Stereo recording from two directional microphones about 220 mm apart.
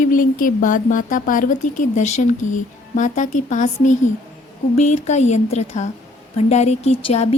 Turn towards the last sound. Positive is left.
turn(degrees=30)  # may be behind; listen again after turning